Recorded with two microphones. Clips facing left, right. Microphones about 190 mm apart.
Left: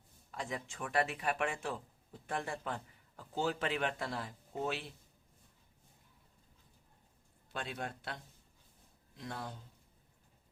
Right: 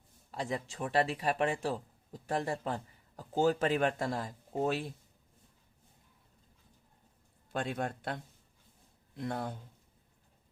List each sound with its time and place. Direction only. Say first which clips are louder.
0.3 s speech: right 5 dB; 35° right (ahead or behind)
7.5 s speech: right 7 dB; 50° right (ahead or behind)